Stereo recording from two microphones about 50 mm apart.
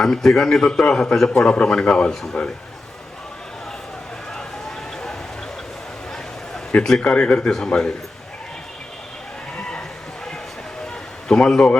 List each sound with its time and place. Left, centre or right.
0.0 s a man's voice: centre
1.5 s a man's voice: centre
6.7 s a man's voice: centre
9.6 s a sound: centre
11.3 s a man's voice: centre